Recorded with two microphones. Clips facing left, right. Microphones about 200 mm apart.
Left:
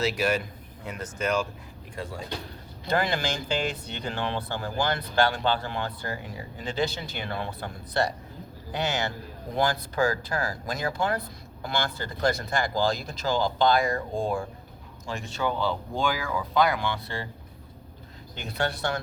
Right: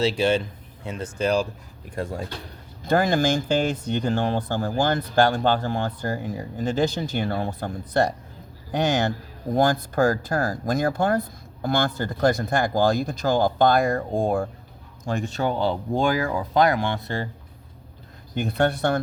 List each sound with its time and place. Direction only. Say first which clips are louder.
0.0 s a man's voice: right 5 dB; 30° right (ahead or behind)
2.0 s speech: right 5 dB; 50° right (ahead or behind)
18.3 s speech: right 8 dB; 55° right (ahead or behind)